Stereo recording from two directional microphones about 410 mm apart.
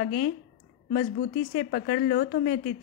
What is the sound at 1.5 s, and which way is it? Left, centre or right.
A woman's voice, centre.